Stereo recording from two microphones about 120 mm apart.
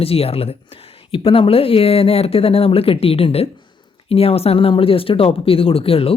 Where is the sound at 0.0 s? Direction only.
55° left (ahead or behind).